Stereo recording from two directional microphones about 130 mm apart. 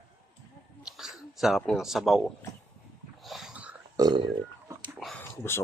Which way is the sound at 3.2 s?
Centre (ahead or behind).